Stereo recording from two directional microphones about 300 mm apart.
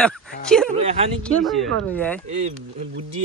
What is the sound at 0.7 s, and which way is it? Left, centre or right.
Speech, centre.